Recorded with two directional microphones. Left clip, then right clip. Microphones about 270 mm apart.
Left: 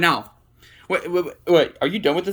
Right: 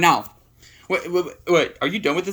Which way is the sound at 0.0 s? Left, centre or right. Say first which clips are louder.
Right 2 dB; centre.